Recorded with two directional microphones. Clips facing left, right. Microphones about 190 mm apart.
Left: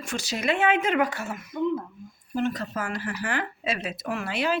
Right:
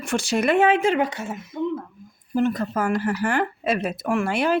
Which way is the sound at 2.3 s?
45° right (ahead or behind).